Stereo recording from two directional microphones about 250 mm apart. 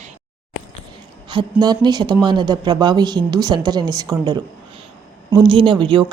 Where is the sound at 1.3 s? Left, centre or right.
Centre.